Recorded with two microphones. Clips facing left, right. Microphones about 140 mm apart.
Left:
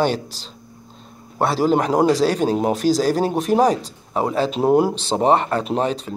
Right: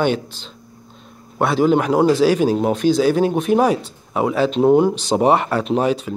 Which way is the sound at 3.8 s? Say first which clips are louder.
Right 2 dB; 35° left (ahead or behind).